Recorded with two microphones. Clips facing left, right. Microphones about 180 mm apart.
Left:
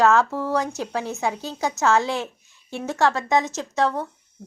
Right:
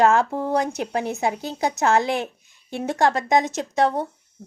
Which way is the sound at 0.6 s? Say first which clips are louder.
Right 2 dB; 60° right (ahead or behind).